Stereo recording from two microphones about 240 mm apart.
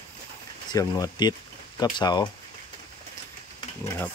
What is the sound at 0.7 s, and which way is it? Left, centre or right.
Speech, centre.